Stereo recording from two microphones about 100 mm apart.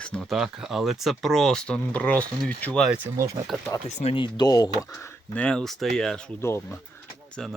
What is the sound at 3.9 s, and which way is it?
Speech, 90° left.